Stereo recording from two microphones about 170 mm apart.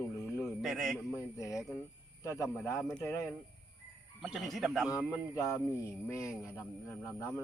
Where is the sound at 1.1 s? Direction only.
20° left (ahead or behind).